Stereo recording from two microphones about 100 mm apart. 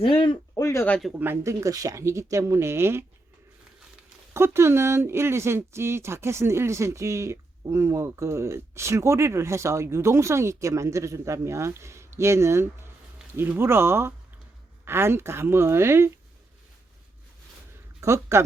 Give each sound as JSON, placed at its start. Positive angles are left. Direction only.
{"t": 0.0, "sound": "speech", "side_deg": 60}
{"t": 0.5, "sound": "speech", "side_deg": 30}
{"t": 1.2, "sound": "speech", "side_deg": -25}
{"t": 4.4, "sound": "speech", "side_deg": -25}
{"t": 18.0, "sound": "speech", "side_deg": -25}